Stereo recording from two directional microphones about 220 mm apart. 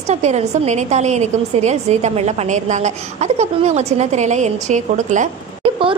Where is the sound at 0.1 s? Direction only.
30° right (ahead or behind).